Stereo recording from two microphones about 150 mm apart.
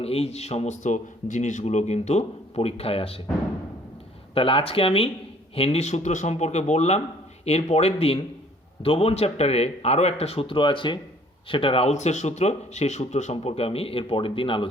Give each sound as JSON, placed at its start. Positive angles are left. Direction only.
{"t": 0.0, "sound": "speech", "side_deg": 40}
{"t": 4.4, "sound": "speech", "side_deg": 35}